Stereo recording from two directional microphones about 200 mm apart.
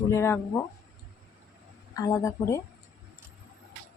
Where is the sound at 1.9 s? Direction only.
15° left (ahead or behind).